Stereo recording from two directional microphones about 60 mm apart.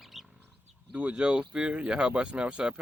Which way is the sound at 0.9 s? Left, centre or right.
Right.